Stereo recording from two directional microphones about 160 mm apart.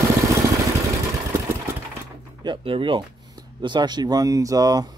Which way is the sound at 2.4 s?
35° right (ahead or behind).